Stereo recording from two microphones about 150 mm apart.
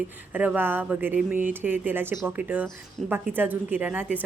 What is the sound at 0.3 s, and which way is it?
Speech, 10° right (ahead or behind).